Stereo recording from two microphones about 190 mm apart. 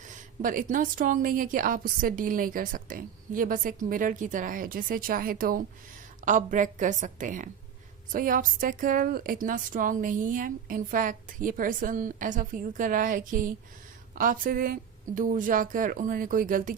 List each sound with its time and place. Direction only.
0.4 s a woman's voice: 45° right (ahead or behind)